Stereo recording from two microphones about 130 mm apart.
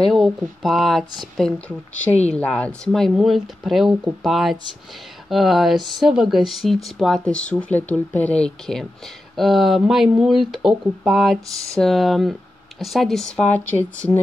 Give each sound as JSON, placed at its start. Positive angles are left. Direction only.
{"t": 0.0, "sound": "speech", "side_deg": 0}
{"t": 2.3, "sound": "speech", "side_deg": 10}
{"t": 11.5, "sound": "speech", "side_deg": -25}
{"t": 11.8, "sound": "speech", "side_deg": 0}